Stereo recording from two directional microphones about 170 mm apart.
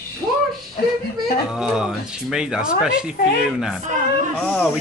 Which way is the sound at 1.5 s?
5° right (ahead or behind).